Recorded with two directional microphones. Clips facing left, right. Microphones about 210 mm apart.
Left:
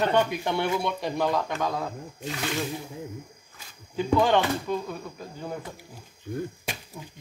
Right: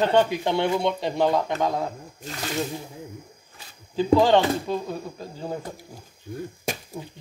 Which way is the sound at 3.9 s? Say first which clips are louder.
Right 4 dB; 30° right (ahead or behind).